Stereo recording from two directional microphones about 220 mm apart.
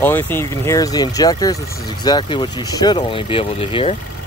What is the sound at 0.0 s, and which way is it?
Speech, 10° left (ahead or behind).